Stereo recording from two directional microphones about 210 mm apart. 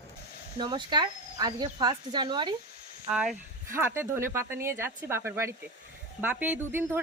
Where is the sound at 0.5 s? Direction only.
20° right (ahead or behind).